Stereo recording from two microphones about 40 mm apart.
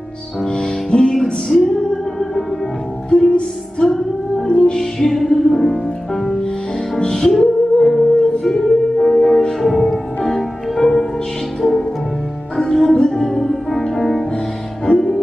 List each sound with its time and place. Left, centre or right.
0.5 s music: left
1.5 s music: centre
3.3 s music: left
12.5 s music: centre